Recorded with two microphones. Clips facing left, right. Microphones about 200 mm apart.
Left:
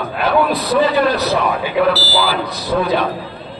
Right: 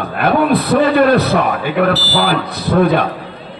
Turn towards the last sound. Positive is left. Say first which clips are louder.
# right 4 dB
turn(degrees=-55)  # may be behind; listen again after turning